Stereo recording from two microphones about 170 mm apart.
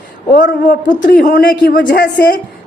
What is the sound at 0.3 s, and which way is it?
A woman's voice, 55° left (ahead or behind).